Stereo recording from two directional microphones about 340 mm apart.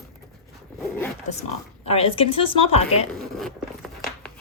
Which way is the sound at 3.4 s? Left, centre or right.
Centre.